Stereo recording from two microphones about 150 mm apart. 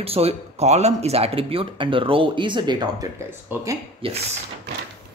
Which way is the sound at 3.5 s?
10° right (ahead or behind).